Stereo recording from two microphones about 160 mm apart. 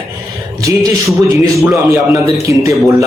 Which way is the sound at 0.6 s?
25° right (ahead or behind).